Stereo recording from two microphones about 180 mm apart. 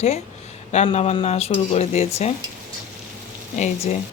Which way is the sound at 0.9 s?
30° left (ahead or behind).